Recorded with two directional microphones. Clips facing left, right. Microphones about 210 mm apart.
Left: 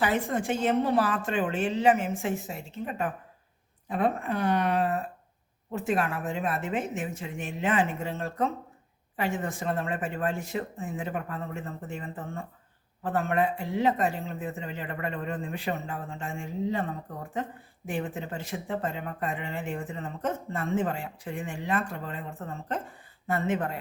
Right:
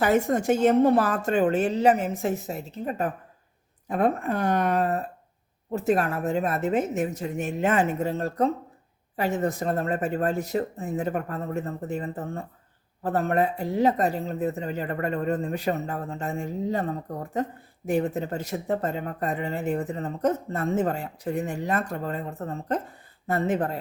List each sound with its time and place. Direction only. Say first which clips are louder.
0.0 s speech: right 5 dB; 45° right (ahead or behind)